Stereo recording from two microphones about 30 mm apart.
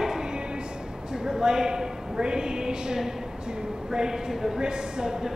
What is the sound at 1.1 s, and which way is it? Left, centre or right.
Speech, right.